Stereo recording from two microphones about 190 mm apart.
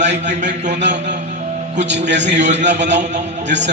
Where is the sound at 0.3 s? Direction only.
40° right (ahead or behind).